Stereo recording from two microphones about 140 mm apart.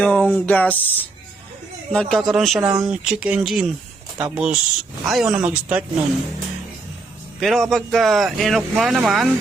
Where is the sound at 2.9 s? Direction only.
5° right (ahead or behind).